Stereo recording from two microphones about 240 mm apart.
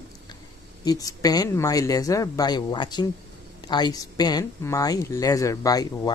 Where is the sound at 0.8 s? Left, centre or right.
Centre.